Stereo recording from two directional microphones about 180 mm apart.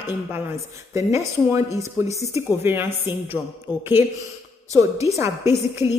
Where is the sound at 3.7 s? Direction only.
25° left (ahead or behind).